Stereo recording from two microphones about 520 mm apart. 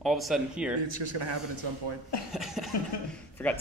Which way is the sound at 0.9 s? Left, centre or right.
Right.